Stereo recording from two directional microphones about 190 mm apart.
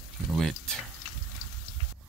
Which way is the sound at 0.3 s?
Centre (ahead or behind).